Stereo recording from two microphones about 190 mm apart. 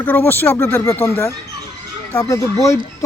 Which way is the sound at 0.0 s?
10° left (ahead or behind).